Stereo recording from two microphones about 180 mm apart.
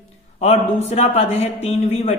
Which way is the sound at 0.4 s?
35° left (ahead or behind).